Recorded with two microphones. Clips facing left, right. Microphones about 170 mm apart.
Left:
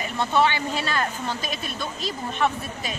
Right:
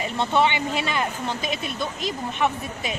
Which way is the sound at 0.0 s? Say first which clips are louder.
Even; 20° right (ahead or behind).